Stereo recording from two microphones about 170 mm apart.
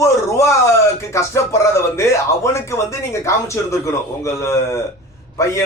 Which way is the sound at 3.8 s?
20° left (ahead or behind).